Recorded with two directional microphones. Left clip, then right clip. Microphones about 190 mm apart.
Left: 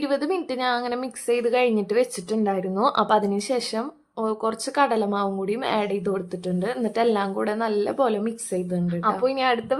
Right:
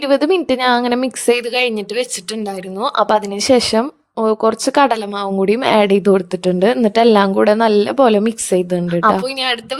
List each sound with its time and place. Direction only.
0.0 s speech: 45° right (ahead or behind)